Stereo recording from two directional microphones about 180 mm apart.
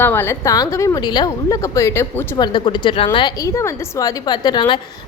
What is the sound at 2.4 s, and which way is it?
A woman's voice, 25° left (ahead or behind).